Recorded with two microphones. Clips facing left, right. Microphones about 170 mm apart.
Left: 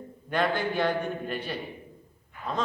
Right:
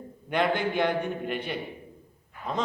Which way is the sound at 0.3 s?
20° right (ahead or behind).